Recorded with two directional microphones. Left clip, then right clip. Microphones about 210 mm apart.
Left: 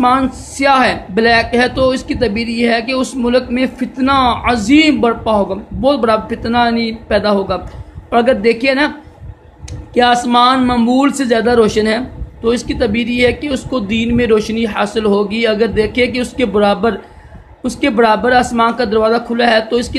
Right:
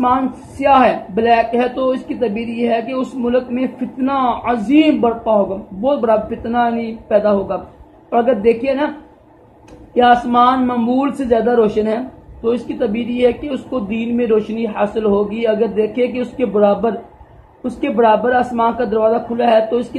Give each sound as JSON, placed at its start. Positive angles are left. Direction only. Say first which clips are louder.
{"t": 0.0, "sound": "speech", "louder": "left 3 dB", "side_deg": 25}
{"t": 9.9, "sound": "speech", "louder": "left 1 dB", "side_deg": 30}